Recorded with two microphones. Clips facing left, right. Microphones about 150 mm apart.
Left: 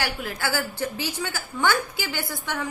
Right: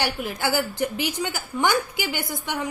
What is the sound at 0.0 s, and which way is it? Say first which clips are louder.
A woman's voice: right 3 dB; 20° right (ahead or behind).